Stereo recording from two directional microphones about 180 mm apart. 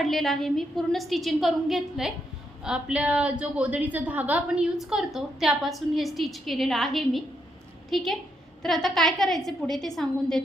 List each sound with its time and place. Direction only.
0.0 s a woman's voice: centre (ahead or behind)